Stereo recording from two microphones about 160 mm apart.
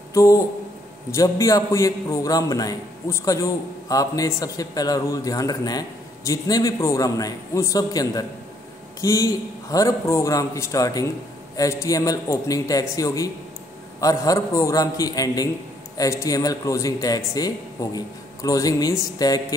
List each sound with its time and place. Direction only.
0.1 s a man's voice: 20° left (ahead or behind)